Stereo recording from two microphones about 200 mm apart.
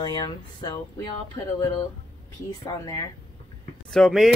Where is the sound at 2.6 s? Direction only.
15° left (ahead or behind).